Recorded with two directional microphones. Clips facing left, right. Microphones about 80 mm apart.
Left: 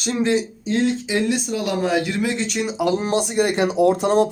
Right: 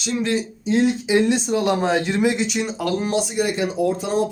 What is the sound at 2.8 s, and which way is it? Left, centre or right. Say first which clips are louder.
Speech: left 4 dB; centre.